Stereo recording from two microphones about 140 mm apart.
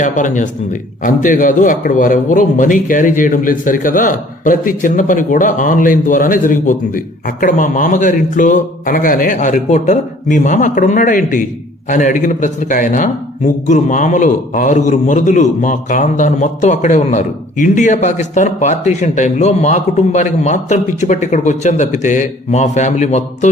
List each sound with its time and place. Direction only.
0.0 s a man's voice: 65° left (ahead or behind)